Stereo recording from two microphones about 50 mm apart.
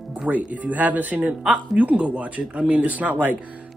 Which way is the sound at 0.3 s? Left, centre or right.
Right.